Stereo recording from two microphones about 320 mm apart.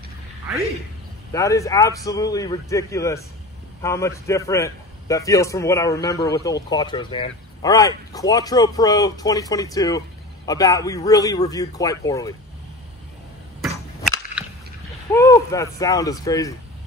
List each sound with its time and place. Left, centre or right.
1.3 s a man's voice: centre
13.6 s whip: centre
15.1 s a man's voice: centre